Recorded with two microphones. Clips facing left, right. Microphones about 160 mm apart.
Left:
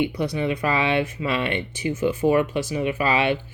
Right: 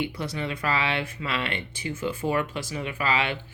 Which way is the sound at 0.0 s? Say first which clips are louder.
Left 7 dB; 15° left (ahead or behind).